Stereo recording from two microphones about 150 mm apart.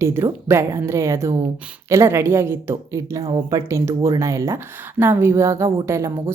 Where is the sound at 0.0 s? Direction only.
20° right (ahead or behind).